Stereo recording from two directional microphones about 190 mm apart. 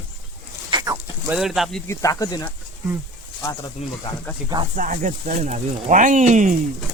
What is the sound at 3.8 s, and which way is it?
Speech, 35° left (ahead or behind).